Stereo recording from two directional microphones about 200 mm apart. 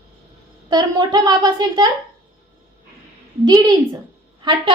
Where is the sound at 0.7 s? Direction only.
20° right (ahead or behind).